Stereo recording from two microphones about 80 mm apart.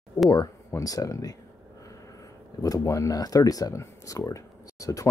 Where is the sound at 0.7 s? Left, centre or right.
Left.